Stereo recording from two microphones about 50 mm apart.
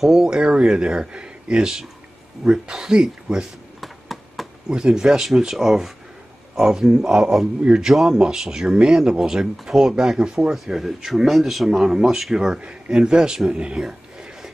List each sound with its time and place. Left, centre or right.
0.0 s speech: centre
0.4 s speech: right
3.8 s a sound: centre
4.6 s speech: centre
12.5 s a man's voice: centre